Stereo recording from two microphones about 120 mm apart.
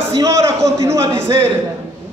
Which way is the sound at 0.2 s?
25° right (ahead or behind).